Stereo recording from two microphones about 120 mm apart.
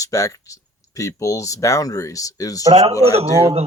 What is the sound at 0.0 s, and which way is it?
Speech, 30° left (ahead or behind).